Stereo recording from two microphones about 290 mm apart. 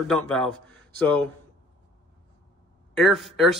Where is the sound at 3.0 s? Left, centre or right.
Centre.